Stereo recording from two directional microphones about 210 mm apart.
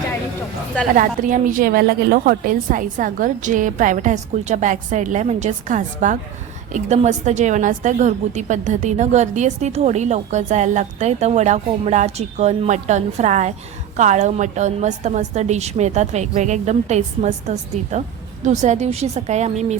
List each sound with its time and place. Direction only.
0.9 s a woman's voice: 40° right (ahead or behind)